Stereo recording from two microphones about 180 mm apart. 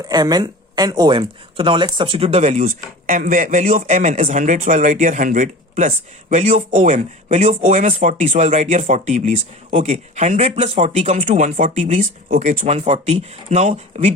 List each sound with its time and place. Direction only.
0.0 s speech: 20° right (ahead or behind); by 14.1 s 40° right (ahead or behind)